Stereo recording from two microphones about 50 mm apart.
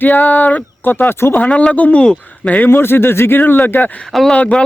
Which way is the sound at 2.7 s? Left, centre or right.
Left.